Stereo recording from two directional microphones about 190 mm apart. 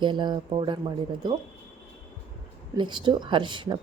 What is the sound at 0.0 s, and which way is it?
Speech, 25° right (ahead or behind).